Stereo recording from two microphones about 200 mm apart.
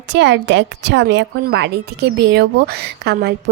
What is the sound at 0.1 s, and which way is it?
A woman's voice, 60° right (ahead or behind).